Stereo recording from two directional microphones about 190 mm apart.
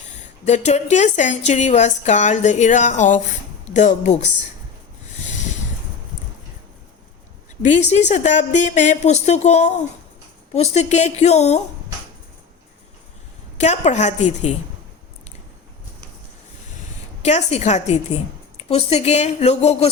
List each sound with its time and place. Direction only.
0.4 s a woman's voice: 35° left (ahead or behind)
7.6 s a woman's voice: 40° left (ahead or behind)
13.6 s a woman's voice: 35° left (ahead or behind)
17.2 s a woman's voice: 40° left (ahead or behind)